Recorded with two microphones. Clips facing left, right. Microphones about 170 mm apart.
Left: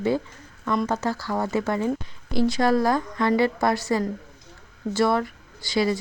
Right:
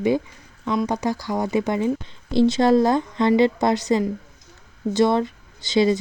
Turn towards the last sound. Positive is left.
turn(degrees=-20)  # may be behind; listen again after turning